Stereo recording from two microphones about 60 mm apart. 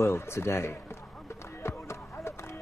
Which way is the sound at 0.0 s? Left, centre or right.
Left.